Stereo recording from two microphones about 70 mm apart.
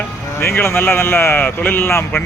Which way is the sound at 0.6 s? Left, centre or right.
Left.